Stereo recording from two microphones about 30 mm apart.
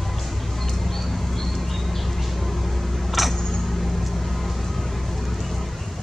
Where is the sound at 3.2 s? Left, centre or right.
Centre.